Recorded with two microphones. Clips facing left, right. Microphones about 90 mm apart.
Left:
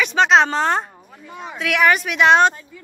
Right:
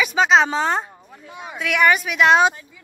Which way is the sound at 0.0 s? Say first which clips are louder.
Left 1 dB; 5° right (ahead or behind).